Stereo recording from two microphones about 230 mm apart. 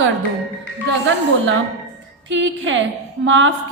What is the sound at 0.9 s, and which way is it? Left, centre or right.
A woman's voice, right.